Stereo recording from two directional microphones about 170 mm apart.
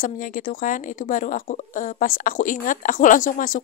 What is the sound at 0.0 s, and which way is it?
Speech, 55° left (ahead or behind).